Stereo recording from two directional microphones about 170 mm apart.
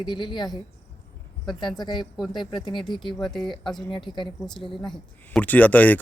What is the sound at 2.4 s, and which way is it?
Speech, 30° left (ahead or behind).